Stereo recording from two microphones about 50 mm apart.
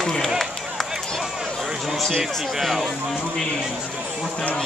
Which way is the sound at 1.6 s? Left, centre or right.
Centre.